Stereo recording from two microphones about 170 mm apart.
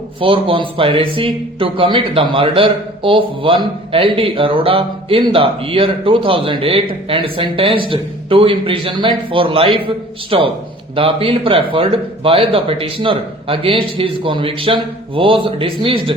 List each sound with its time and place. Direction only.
0.2 s a man's voice: 30° right (ahead or behind)